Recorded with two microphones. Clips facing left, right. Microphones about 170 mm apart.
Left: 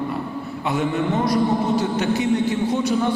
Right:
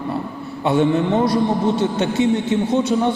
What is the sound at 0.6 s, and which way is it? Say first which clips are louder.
A man's voice: right 6 dB; 30° right (ahead or behind).